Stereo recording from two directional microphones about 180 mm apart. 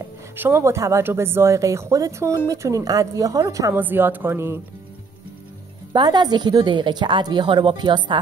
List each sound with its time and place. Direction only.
0.0 s speech: 15° right (ahead or behind)
5.9 s a woman's voice: 25° right (ahead or behind)